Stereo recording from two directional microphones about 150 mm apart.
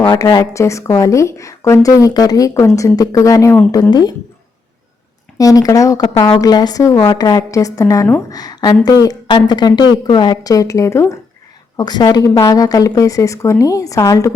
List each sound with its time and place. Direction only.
0.2 s speech: 25° left (ahead or behind)
5.4 s a woman's voice: 25° left (ahead or behind)